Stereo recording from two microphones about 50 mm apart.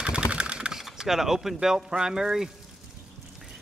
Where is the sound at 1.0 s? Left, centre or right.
Centre.